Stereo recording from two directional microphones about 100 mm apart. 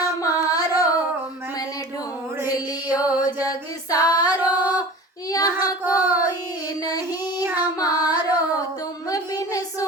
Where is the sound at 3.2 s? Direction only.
40° left (ahead or behind).